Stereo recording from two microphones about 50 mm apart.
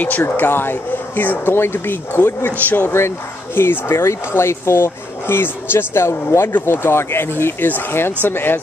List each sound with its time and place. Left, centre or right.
0.0 s speech: left